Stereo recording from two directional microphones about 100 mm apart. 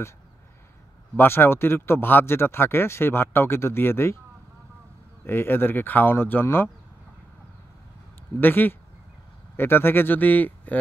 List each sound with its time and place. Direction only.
1.1 s speech: 20° left (ahead or behind)
5.2 s speech: 20° left (ahead or behind)
8.4 s speech: 20° left (ahead or behind)